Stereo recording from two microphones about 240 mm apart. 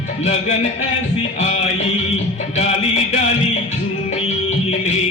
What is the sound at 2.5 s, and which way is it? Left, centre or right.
Music, left.